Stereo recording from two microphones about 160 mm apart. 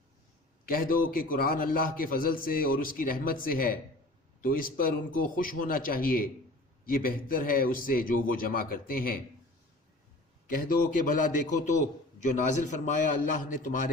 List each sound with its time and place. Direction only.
0.6 s a man's voice: 65° left (ahead or behind)
10.4 s a man's voice: 60° left (ahead or behind)